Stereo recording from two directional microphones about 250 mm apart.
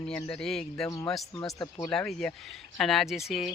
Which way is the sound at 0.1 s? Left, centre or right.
Centre.